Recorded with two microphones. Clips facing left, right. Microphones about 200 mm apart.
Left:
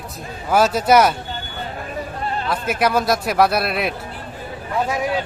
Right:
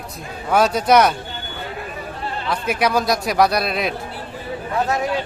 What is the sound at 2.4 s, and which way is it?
A man's voice, centre (ahead or behind).